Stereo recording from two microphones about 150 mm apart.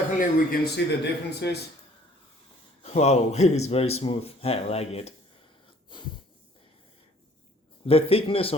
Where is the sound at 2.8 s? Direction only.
45° left (ahead or behind).